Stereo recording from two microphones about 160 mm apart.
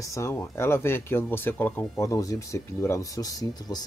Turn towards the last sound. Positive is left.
turn(degrees=25)  # may be behind; listen again after turning